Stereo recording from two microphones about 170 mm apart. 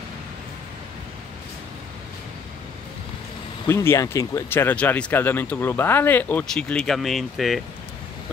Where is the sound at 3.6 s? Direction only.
15° left (ahead or behind); by 7.5 s centre (ahead or behind).